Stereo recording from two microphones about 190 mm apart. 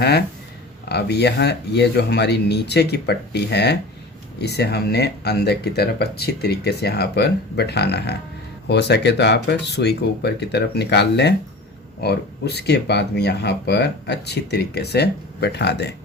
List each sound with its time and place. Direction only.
0.9 s speech: 60° left (ahead or behind)